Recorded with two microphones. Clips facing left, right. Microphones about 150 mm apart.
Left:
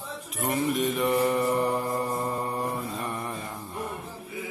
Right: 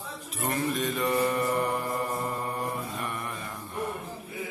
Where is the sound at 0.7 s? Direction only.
20° left (ahead or behind).